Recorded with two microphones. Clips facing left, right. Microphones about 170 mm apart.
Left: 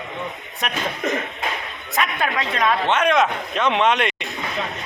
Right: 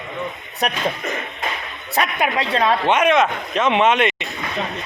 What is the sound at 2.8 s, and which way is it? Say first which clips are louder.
A man's voice: right 2 dB; 10° right (ahead or behind).